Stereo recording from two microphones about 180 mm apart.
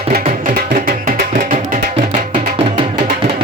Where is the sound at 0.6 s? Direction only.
55° right (ahead or behind).